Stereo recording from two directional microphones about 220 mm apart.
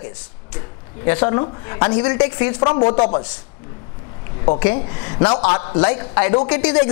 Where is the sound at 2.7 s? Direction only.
30° left (ahead or behind).